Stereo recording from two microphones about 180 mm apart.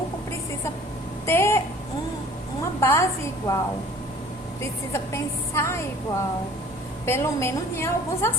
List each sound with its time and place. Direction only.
1.2 s a sound: 15° left (ahead or behind)
2.8 s a woman's voice: 15° left (ahead or behind)
4.9 s a woman's voice: 15° left (ahead or behind)